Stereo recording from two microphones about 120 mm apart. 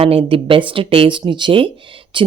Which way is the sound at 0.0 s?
55° right (ahead or behind).